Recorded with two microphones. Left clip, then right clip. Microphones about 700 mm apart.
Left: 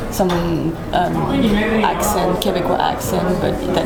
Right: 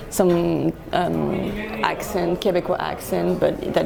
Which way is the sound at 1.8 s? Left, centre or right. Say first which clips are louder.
Left 1 dB; right.